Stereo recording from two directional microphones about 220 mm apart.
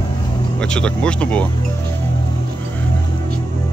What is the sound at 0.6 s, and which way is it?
Speech, 5° left (ahead or behind).